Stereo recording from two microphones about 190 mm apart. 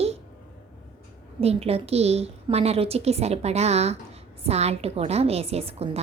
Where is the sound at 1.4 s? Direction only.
30° right (ahead or behind).